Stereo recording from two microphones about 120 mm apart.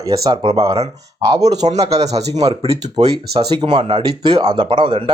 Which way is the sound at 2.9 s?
40° right (ahead or behind).